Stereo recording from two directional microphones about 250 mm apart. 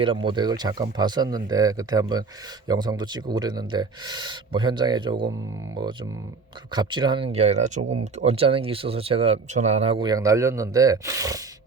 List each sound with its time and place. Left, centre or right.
0.0 s speech: centre